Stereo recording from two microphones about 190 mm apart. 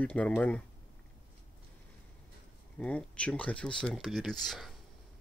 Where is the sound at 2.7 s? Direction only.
5° left (ahead or behind).